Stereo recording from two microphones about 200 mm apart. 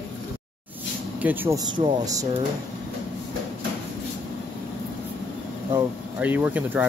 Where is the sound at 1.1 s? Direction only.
10° right (ahead or behind).